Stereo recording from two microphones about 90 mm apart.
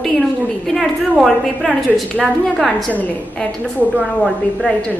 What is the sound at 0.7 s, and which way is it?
A woman's voice, centre (ahead or behind).